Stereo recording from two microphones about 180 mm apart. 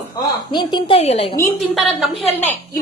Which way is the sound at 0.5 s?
25° left (ahead or behind).